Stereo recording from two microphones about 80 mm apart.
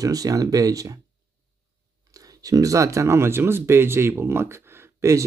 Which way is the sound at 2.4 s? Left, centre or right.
Right.